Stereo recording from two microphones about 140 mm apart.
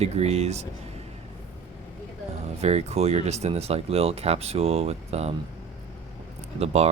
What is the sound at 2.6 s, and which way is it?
Speech, 50° right (ahead or behind).